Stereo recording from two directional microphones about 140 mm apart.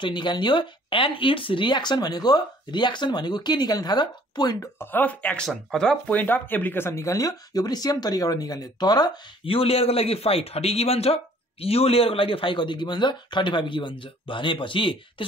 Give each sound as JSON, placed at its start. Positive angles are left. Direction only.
{"t": 0.0, "sound": "speech", "side_deg": 35}
{"t": 4.7, "sound": "speech", "side_deg": 10}
{"t": 9.6, "sound": "a man's voice", "side_deg": 45}